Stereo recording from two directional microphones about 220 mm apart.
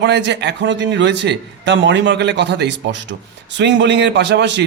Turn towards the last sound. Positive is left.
turn(degrees=-55)  # may be behind; listen again after turning